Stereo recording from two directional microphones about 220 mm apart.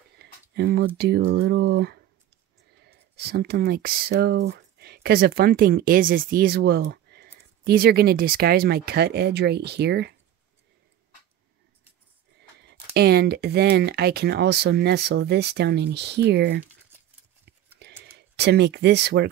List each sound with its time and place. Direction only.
0.2 s speech: 45° right (ahead or behind)
12.9 s speech: 45° right (ahead or behind)
17.8 s a sound: 50° right (ahead or behind)
18.3 s speech: 50° right (ahead or behind)